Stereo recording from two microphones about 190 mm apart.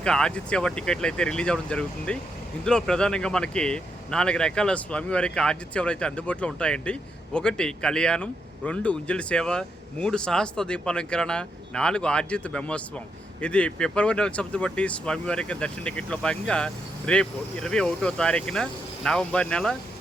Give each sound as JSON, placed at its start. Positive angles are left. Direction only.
{"t": 0.0, "sound": "speech", "side_deg": 5}